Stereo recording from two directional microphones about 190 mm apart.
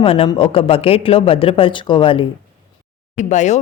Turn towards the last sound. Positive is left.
turn(degrees=40)  # may be behind; listen again after turning